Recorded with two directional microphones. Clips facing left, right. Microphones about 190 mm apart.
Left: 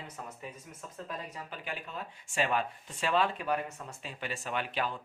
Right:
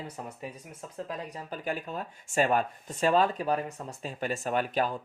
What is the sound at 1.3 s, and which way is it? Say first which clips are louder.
Speech: right 7 dB; 40° right (ahead or behind).